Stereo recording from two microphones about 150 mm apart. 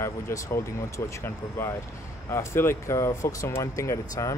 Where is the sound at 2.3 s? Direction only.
15° left (ahead or behind).